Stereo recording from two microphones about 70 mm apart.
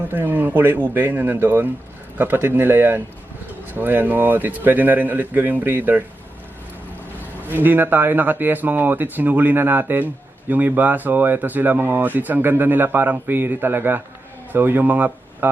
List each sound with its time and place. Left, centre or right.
0.1 s speech: right
7.4 s speech: right